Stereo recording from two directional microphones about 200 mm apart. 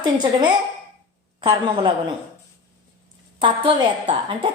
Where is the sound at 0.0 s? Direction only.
20° right (ahead or behind).